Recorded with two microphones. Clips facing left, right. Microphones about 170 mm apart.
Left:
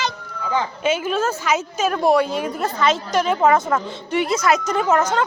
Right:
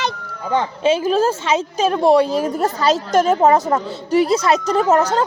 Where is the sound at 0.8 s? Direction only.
30° right (ahead or behind).